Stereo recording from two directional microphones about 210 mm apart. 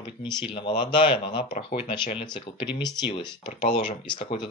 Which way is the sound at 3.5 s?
40° left (ahead or behind).